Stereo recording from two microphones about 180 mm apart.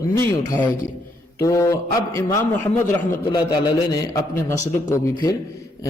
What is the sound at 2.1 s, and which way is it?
A man's voice, 15° left (ahead or behind).